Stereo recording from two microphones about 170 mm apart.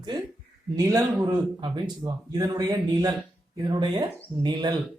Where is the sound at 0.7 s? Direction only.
20° right (ahead or behind).